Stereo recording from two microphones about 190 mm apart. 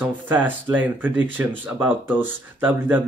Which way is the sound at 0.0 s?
10° right (ahead or behind).